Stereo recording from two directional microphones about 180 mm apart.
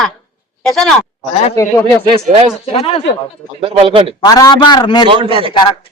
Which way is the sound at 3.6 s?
30° right (ahead or behind).